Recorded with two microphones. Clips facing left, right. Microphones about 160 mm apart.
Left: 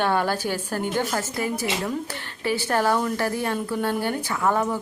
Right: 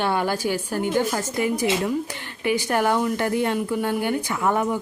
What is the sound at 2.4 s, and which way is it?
A woman's voice, 15° right (ahead or behind).